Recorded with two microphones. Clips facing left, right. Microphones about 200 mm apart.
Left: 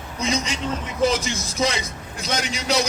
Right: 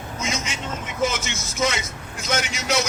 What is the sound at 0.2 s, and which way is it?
A man's voice, 35° left (ahead or behind).